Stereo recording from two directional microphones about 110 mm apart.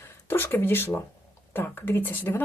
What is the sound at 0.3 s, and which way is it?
Speech, 20° left (ahead or behind).